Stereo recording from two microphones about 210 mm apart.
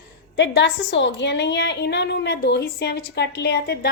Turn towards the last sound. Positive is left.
turn(degrees=50)  # may be behind; listen again after turning